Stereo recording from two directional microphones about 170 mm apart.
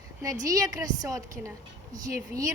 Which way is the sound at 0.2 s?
20° right (ahead or behind).